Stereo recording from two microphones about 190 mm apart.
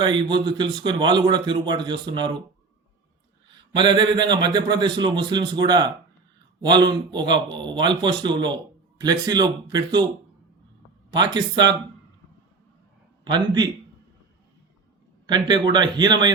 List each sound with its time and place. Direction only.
0.0 s a man's voice: 25° right (ahead or behind)
3.8 s a man's voice: 25° right (ahead or behind)
11.1 s a man's voice: 25° right (ahead or behind)
13.2 s a man's voice: 25° right (ahead or behind)
15.3 s a man's voice: 25° right (ahead or behind)